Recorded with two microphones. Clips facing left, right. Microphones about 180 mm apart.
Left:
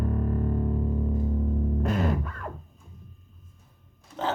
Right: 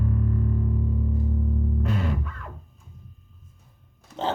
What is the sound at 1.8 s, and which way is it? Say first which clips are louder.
Music: left 3 dB; 45° left (ahead or behind).